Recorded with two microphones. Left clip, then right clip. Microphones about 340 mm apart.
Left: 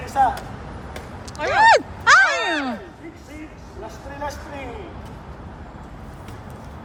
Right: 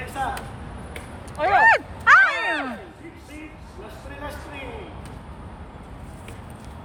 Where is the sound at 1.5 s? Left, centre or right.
Centre.